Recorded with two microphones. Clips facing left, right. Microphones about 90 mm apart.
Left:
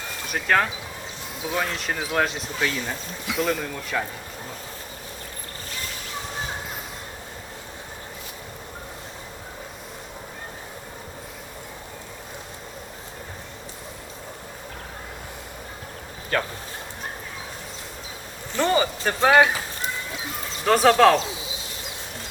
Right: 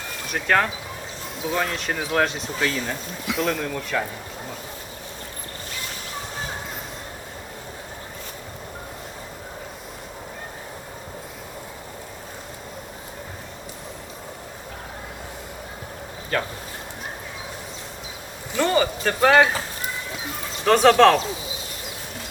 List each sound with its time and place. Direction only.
0.3 s speech: centre (ahead or behind)
18.6 s a sound: 20° left (ahead or behind)
19.0 s speech: 15° left (ahead or behind)
20.7 s speech: 5° left (ahead or behind)